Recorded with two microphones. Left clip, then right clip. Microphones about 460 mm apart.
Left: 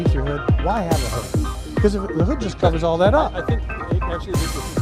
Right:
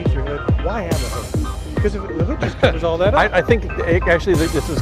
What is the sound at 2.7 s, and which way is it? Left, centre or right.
Speech, left.